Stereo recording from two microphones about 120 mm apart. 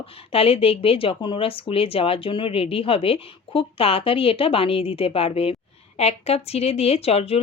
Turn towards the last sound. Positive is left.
turn(degrees=60)  # may be behind; listen again after turning